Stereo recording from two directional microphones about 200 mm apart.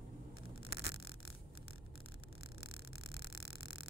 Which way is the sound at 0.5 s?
50° left (ahead or behind).